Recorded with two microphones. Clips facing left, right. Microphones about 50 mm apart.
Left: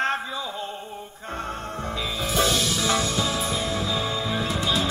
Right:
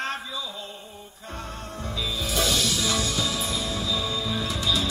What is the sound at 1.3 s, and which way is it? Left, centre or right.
Music, left.